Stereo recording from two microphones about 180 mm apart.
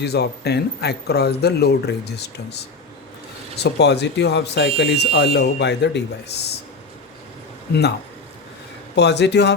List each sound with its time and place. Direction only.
0.0 s speech: 65° left (ahead or behind)
3.6 s speech: 70° left (ahead or behind)
7.7 s speech: 65° left (ahead or behind)
9.0 s speech: 70° left (ahead or behind)